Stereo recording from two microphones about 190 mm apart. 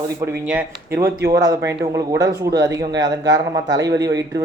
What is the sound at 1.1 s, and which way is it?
Speech, 60° right (ahead or behind).